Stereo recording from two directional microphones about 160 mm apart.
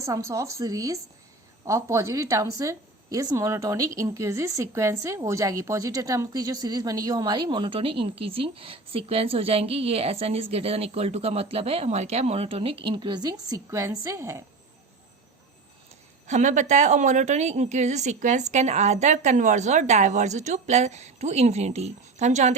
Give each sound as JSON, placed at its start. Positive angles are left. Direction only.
{"t": 0.0, "sound": "a woman's voice", "side_deg": -20}
{"t": 16.2, "sound": "a woman's voice", "side_deg": -50}